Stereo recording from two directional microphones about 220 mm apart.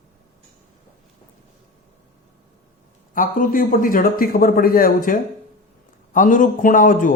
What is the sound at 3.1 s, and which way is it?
A man's voice, 40° left (ahead or behind).